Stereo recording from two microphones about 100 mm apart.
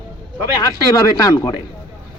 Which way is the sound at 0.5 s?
40° left (ahead or behind).